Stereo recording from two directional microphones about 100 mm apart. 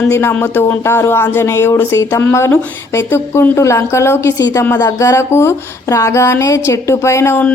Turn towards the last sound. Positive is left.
turn(degrees=25)  # may be behind; listen again after turning